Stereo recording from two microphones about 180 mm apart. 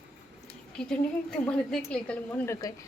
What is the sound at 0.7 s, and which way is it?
A woman's voice, 5° left (ahead or behind).